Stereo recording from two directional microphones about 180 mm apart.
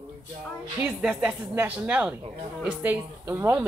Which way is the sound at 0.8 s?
10° right (ahead or behind).